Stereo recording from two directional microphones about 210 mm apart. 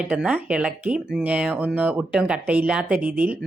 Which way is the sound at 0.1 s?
5° right (ahead or behind).